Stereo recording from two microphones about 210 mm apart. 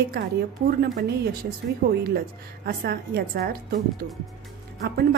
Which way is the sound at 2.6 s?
45° right (ahead or behind).